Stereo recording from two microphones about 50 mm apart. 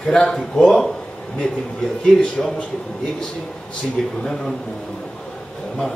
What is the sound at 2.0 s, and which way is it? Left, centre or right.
Speech, centre.